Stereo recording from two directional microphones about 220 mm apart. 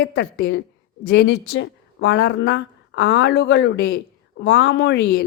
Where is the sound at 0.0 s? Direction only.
50° left (ahead or behind).